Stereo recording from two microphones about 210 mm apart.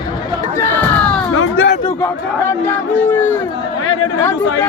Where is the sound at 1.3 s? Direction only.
90° left.